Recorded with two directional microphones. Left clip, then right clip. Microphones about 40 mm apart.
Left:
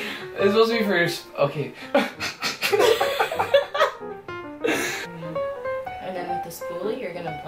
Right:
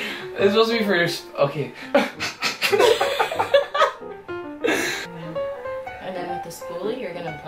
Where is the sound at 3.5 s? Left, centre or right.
Left.